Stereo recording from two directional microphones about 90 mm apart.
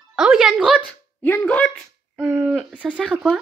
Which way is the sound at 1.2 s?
15° left (ahead or behind).